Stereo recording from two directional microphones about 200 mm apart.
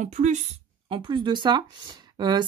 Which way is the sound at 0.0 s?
35° right (ahead or behind).